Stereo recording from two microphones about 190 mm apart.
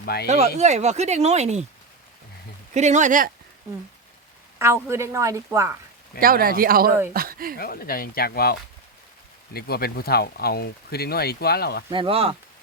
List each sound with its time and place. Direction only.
0.0 s speech: 55° left (ahead or behind)
0.3 s speech: 35° right (ahead or behind)
2.7 s speech: 40° right (ahead or behind)
4.5 s a woman's voice: 15° right (ahead or behind)
6.1 s speech: 50° right (ahead or behind)
7.6 s speech: 50° left (ahead or behind)
11.9 s speech: 25° right (ahead or behind)